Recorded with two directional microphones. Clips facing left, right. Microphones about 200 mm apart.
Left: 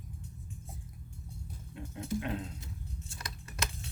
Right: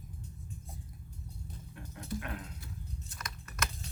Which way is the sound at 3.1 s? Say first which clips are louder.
Left 1 dB; 30° left (ahead or behind).